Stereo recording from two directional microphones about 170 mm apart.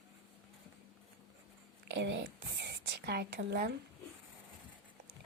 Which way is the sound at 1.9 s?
90° right.